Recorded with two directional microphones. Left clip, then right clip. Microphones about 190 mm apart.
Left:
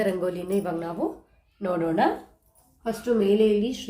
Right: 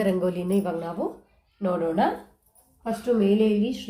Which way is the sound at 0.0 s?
15° right (ahead or behind).